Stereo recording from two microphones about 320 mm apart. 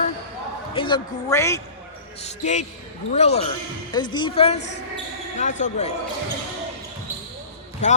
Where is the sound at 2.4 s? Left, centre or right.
Left.